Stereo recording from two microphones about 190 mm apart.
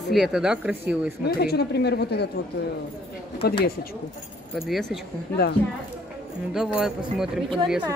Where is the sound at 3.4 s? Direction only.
60° left (ahead or behind).